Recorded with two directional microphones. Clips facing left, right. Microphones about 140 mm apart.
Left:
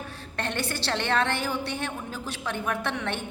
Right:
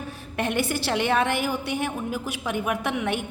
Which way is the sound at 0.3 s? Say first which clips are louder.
Right 5 dB; 15° right (ahead or behind).